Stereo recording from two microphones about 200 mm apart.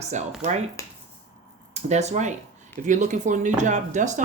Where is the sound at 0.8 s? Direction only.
15° left (ahead or behind).